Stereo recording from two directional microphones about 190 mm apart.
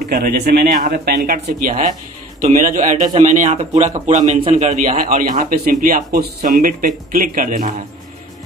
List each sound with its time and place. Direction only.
0.0 s a man's voice: 50° right (ahead or behind)